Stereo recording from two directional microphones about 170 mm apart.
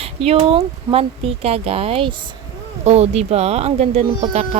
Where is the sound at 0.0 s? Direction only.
35° right (ahead or behind).